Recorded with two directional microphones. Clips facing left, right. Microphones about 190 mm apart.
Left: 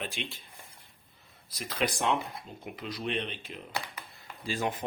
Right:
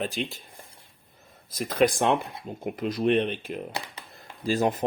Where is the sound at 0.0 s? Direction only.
40° right (ahead or behind).